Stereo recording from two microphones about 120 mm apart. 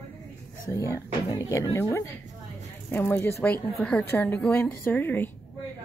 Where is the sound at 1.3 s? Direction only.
25° left (ahead or behind).